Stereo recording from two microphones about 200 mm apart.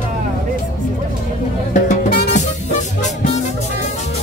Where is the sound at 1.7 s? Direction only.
40° left (ahead or behind).